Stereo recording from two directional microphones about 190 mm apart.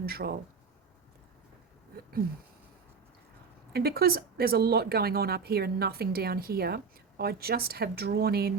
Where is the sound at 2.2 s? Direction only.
50° right (ahead or behind).